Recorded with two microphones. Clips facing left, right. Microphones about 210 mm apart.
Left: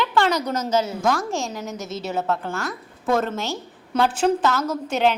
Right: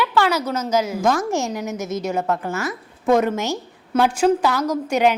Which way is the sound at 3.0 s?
15° right (ahead or behind).